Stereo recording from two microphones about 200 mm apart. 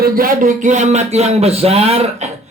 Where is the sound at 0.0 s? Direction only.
45° right (ahead or behind).